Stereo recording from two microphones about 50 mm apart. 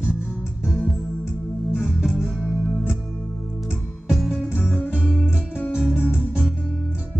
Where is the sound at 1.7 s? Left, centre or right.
Centre.